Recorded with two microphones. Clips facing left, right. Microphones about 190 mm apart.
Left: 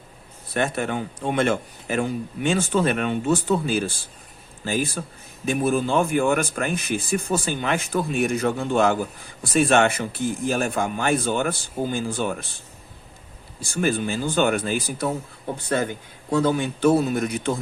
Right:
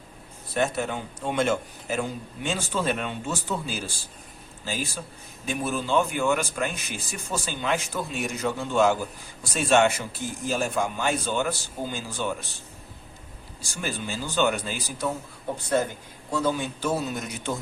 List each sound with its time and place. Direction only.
0.5 s speech: 65° left (ahead or behind)
13.6 s speech: 55° left (ahead or behind)
16.3 s speech: 60° left (ahead or behind)